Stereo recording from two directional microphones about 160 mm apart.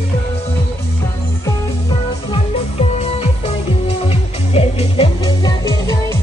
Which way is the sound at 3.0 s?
40° left (ahead or behind).